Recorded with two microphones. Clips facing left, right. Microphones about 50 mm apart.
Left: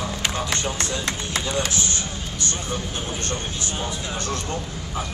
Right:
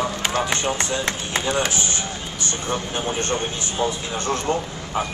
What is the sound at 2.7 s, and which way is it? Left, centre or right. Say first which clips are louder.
Speech: right 4 dB; right.